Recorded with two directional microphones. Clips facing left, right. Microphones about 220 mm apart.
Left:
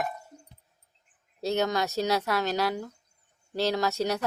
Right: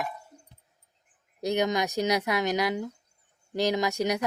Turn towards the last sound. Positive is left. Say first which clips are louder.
# right 1 dB
turn(degrees=-15)  # may be behind; listen again after turning